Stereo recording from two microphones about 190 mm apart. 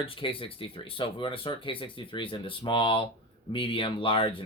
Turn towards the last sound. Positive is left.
turn(degrees=25)  # may be behind; listen again after turning